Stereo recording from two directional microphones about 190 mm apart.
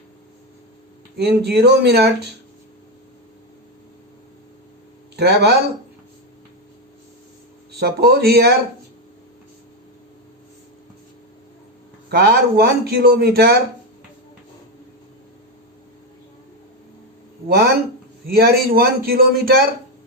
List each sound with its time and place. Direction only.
1.1 s speech: 60° right (ahead or behind)
5.1 s speech: 60° right (ahead or behind)
7.8 s speech: 55° right (ahead or behind)
12.0 s speech: 60° right (ahead or behind)
18.3 s a man's voice: 55° right (ahead or behind)